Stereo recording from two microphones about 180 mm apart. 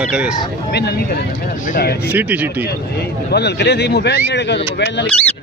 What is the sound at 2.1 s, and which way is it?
Speech, 10° right (ahead or behind).